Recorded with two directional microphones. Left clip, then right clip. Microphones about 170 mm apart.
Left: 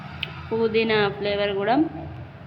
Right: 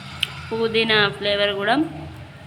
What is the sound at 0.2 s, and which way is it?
Speech, centre (ahead or behind).